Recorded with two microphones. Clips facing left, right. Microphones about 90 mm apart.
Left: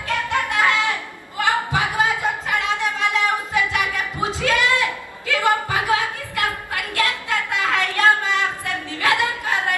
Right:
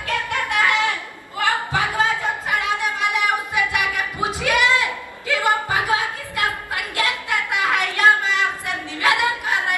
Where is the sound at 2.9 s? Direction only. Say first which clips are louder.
Even; 15° right (ahead or behind).